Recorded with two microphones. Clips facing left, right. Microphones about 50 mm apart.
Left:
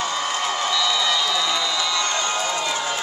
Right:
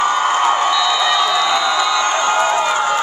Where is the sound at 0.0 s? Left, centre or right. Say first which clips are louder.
Right 10 dB; right.